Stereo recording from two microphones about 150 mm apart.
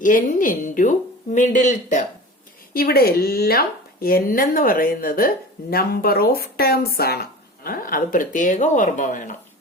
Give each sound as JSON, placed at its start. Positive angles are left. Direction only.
{"t": 0.0, "sound": "a woman's voice", "side_deg": 60}
{"t": 2.7, "sound": "speech", "side_deg": 85}
{"t": 5.7, "sound": "speech", "side_deg": 90}